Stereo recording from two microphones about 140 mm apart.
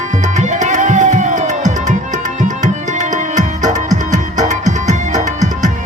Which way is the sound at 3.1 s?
65° right (ahead or behind).